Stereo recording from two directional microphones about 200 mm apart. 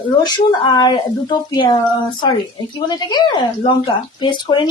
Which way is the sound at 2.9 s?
20° left (ahead or behind).